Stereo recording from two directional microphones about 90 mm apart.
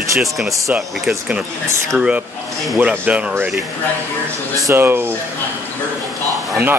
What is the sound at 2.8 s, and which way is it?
Speech, 15° right (ahead or behind).